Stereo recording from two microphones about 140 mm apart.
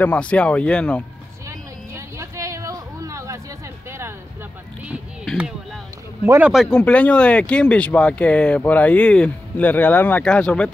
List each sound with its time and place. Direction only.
0.0 s speech: 10° left (ahead or behind)
2.0 s a sound: 20° right (ahead or behind)
6.2 s speech: 15° right (ahead or behind)
6.5 s speech: 5° left (ahead or behind)